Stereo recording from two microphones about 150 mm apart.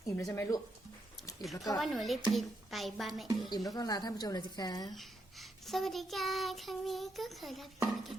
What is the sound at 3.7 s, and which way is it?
A woman's voice, 25° left (ahead or behind).